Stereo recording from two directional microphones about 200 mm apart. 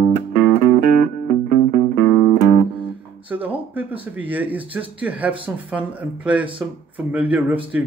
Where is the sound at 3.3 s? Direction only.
10° right (ahead or behind).